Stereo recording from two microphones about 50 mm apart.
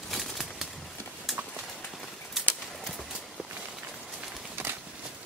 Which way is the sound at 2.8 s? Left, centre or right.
Centre.